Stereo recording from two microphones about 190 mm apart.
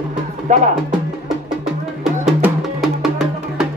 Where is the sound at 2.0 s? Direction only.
Centre (ahead or behind).